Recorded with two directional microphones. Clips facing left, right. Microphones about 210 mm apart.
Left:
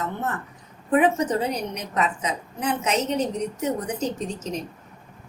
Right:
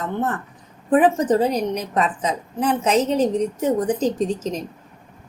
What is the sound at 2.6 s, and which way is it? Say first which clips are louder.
Speech: right 5 dB; 30° right (ahead or behind).